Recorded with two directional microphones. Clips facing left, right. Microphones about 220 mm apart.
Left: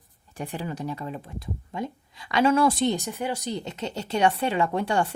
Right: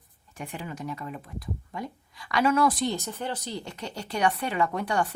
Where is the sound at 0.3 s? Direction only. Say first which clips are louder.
Left 4 dB; 35° left (ahead or behind).